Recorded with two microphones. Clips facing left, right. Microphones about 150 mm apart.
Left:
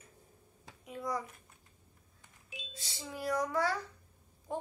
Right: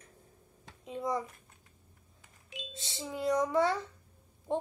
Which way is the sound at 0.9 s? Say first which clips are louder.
Right 4 dB; 25° right (ahead or behind).